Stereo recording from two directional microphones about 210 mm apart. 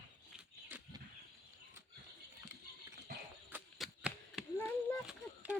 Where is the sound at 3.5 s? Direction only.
5° right (ahead or behind).